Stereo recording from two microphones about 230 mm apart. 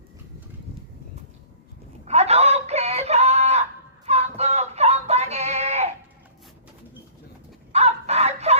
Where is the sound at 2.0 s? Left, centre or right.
Right.